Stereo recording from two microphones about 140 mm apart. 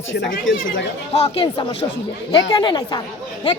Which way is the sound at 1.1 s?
45° left (ahead or behind).